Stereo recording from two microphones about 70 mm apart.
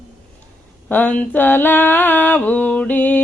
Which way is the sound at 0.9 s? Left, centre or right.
Left.